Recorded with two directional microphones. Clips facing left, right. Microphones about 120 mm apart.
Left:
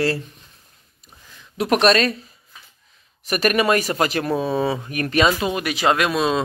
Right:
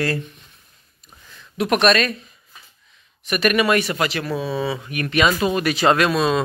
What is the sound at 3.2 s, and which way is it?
Speech, 35° left (ahead or behind).